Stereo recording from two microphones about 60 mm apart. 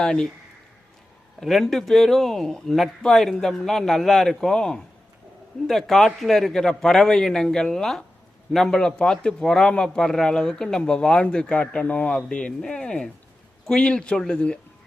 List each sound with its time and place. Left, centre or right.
0.0 s a man's voice: centre
1.4 s a man's voice: centre